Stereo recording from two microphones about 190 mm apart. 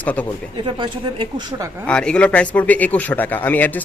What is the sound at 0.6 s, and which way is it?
Speech, 25° right (ahead or behind).